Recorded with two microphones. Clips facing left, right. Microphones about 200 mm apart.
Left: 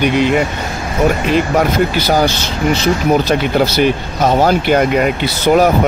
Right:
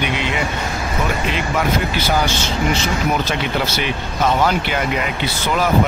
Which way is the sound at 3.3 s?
40° left (ahead or behind).